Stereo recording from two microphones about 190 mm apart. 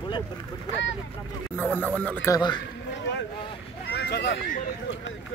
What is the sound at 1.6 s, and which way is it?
Speech, 10° left (ahead or behind).